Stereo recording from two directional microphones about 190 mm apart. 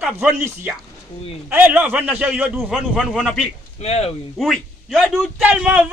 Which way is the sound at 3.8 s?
35° left (ahead or behind).